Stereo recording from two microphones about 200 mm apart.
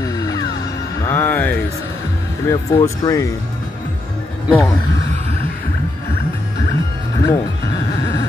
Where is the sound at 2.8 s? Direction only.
15° left (ahead or behind).